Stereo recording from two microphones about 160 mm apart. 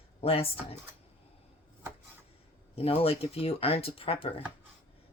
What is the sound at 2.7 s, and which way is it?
Speech, 35° left (ahead or behind).